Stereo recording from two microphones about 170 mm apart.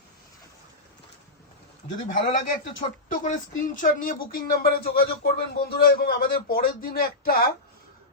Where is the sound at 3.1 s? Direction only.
50° left (ahead or behind).